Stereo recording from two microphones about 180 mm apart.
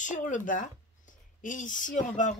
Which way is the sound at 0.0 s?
45° left (ahead or behind).